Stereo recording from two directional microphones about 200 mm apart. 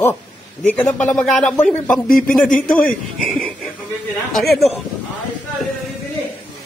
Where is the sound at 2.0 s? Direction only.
45° left (ahead or behind).